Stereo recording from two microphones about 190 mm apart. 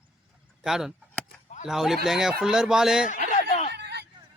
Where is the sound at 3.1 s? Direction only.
40° left (ahead or behind).